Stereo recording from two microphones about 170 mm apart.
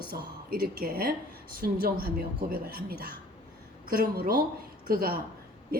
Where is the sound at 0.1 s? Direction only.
60° right (ahead or behind).